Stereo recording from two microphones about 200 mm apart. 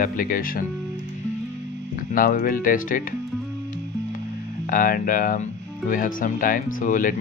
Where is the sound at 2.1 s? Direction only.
45° left (ahead or behind).